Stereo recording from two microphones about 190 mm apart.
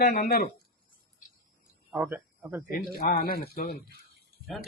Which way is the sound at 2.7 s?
50° left (ahead or behind).